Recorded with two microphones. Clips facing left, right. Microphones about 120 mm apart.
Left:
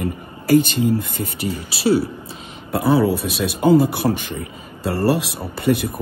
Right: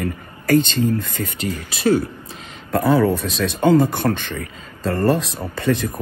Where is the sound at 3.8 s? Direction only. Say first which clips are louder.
Even; 60° right (ahead or behind).